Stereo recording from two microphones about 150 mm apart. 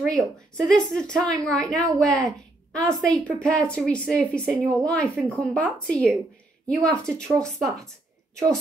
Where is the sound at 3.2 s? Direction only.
5° left (ahead or behind).